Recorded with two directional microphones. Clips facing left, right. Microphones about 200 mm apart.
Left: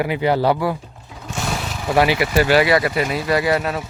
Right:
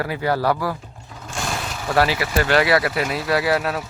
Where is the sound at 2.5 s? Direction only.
Centre (ahead or behind).